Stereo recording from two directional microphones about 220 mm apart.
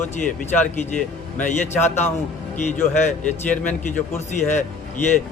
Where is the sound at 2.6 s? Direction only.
35° left (ahead or behind).